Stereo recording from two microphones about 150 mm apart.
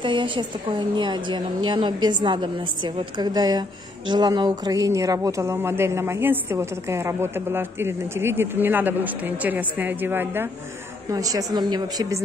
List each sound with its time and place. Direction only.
0.0 s a woman's voice: 35° right (ahead or behind)